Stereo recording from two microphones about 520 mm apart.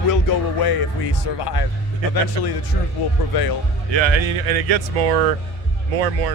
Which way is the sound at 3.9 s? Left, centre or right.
Right.